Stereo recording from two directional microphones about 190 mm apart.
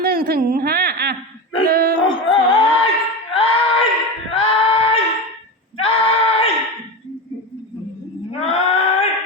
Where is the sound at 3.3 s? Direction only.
30° left (ahead or behind).